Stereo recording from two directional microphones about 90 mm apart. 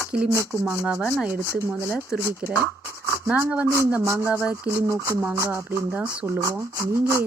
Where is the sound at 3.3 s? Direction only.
15° right (ahead or behind).